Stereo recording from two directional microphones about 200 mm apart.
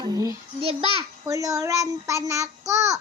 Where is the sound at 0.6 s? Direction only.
30° right (ahead or behind).